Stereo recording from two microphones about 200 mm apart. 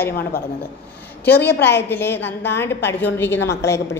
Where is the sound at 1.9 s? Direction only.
10° left (ahead or behind).